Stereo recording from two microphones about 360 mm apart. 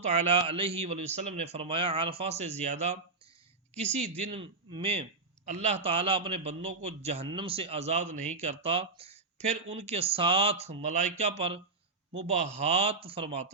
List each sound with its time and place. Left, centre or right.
0.0 s a man's voice: centre
4.3 s a man's voice: centre